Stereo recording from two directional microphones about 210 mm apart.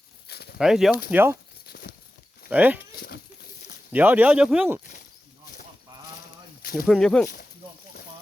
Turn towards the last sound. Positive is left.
turn(degrees=45)  # may be behind; listen again after turning